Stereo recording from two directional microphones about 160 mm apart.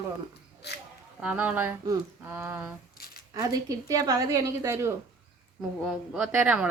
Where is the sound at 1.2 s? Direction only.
10° right (ahead or behind).